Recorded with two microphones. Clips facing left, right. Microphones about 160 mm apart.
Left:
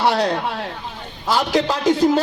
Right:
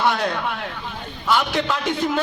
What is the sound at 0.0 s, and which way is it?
A man's voice, 35° left (ahead or behind).